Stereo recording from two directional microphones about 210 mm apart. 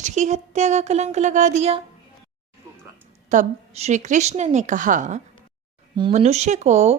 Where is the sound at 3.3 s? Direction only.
35° right (ahead or behind).